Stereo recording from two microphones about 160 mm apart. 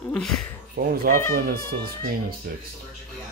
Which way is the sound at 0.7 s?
70° right (ahead or behind).